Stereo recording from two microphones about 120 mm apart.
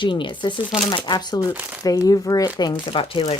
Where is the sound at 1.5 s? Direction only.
15° right (ahead or behind).